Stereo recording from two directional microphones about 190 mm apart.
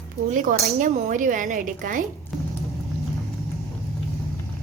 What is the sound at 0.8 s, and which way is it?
Speech, 40° right (ahead or behind).